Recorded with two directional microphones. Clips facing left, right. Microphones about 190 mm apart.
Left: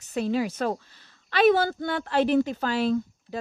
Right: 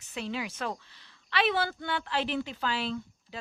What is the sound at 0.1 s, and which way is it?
A woman's voice, 40° left (ahead or behind).